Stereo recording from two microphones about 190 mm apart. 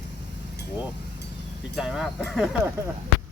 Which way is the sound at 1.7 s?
Centre (ahead or behind).